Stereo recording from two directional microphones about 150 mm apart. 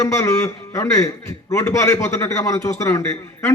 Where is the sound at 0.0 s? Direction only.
20° left (ahead or behind).